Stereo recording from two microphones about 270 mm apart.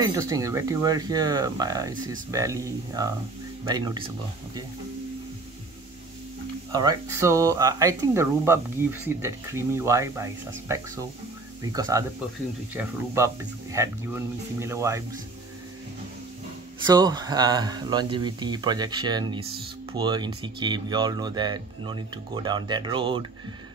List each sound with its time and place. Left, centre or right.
0.0 s speech: centre
6.7 s speech: centre
16.8 s speech: centre